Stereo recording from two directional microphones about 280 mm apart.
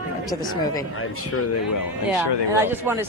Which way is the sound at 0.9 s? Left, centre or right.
Left.